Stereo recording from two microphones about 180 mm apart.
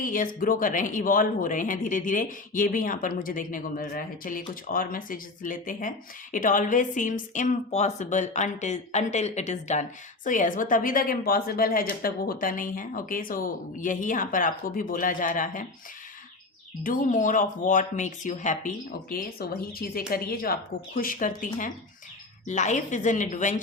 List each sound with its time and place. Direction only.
0.0 s a woman's voice: 50° left (ahead or behind)
16.8 s speech: 50° left (ahead or behind)